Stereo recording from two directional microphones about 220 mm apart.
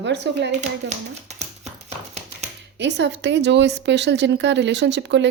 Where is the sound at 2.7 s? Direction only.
50° right (ahead or behind).